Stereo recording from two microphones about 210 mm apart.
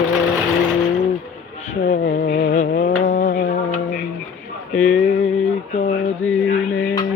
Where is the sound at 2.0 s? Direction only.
45° left (ahead or behind).